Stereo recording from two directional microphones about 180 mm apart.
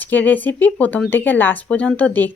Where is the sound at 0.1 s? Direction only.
10° left (ahead or behind).